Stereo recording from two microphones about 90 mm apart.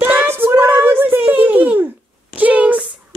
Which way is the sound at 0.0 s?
20° right (ahead or behind).